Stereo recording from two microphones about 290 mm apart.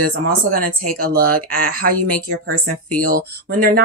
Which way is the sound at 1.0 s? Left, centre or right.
Right.